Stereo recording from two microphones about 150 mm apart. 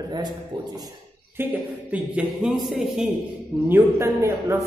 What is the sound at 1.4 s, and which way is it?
A man's voice, 10° right (ahead or behind).